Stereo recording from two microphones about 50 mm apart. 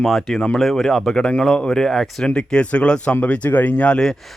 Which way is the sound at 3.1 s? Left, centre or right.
Left.